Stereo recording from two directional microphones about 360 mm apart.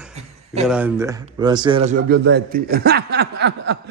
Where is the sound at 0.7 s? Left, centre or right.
Centre.